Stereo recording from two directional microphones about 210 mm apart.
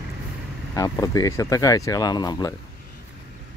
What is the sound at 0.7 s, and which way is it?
Speech, 15° left (ahead or behind).